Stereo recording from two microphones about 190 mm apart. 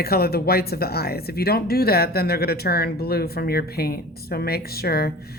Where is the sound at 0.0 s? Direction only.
55° left (ahead or behind).